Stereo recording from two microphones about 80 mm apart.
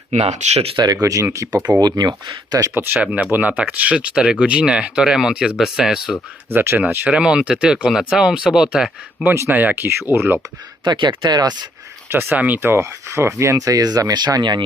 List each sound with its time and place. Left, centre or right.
1.0 s speech: right
1.8 s speech: right
2.7 s speech: right
3.0 s speech: centre
6.5 s speech: right; by 8.9 s centre
9.2 s speech: right
9.5 s speech: right
10.8 s speech: right
12.0 s speech: right